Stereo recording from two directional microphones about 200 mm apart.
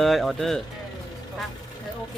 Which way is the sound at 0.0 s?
Centre (ahead or behind).